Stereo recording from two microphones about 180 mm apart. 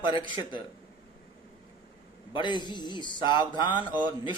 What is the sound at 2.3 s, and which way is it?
A man's voice, 25° left (ahead or behind).